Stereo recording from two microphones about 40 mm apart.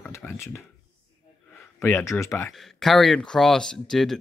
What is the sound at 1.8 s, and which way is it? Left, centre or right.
Speech, left.